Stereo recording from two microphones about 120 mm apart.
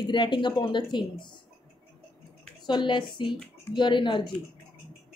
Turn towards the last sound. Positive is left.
turn(degrees=40)  # may be behind; listen again after turning